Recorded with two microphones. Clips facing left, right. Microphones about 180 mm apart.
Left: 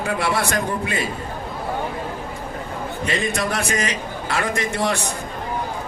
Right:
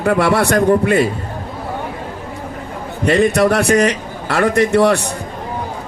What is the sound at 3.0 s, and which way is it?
A man's voice, 60° right (ahead or behind).